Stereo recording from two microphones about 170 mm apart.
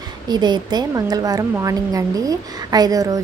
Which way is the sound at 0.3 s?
25° right (ahead or behind).